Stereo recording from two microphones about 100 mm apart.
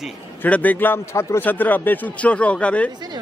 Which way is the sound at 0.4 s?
15° left (ahead or behind).